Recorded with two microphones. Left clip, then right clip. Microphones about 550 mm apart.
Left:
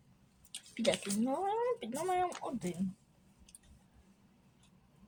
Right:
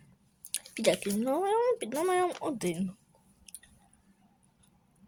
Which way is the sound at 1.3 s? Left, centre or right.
Right.